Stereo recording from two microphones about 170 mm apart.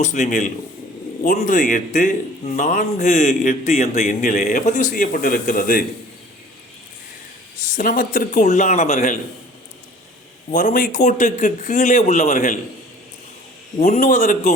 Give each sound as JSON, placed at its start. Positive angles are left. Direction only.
{"t": 0.0, "sound": "a man's voice", "side_deg": 45}
{"t": 7.7, "sound": "a man's voice", "side_deg": 50}
{"t": 10.5, "sound": "a man's voice", "side_deg": 50}
{"t": 13.7, "sound": "a man's voice", "side_deg": 45}